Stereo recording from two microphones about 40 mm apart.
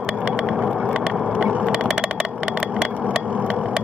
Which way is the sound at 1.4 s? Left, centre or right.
Right.